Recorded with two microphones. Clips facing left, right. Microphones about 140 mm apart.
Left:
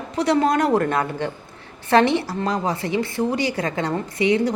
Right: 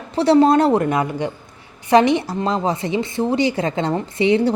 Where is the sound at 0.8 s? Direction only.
15° right (ahead or behind).